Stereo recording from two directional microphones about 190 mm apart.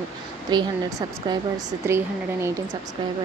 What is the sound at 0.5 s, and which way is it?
A woman's voice, 20° right (ahead or behind).